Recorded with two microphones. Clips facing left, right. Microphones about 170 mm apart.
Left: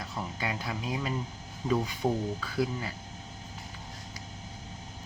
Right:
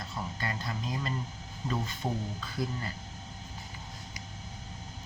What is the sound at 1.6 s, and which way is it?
Speech, 10° left (ahead or behind).